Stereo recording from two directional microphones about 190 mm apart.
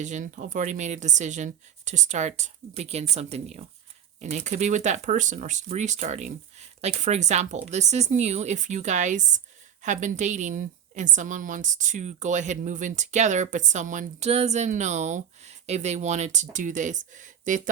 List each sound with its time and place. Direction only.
0.0 s a woman's voice: 40° right (ahead or behind)